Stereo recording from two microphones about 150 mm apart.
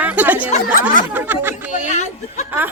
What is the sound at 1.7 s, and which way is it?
Speech, 55° left (ahead or behind).